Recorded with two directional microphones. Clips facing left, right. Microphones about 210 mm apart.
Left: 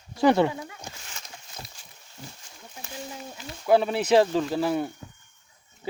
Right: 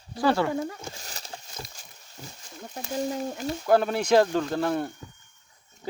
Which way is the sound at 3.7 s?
5° left (ahead or behind).